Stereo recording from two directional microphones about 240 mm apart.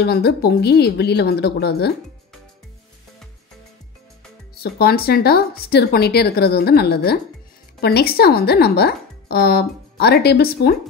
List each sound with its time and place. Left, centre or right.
0.0 s a woman's voice: left
4.6 s speech: left